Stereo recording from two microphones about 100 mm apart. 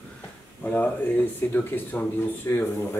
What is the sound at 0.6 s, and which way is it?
Speech, 15° left (ahead or behind).